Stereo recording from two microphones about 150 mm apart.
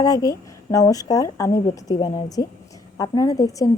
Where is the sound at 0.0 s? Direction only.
25° left (ahead or behind).